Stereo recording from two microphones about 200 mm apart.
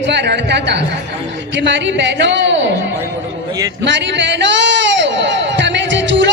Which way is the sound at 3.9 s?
60° right (ahead or behind).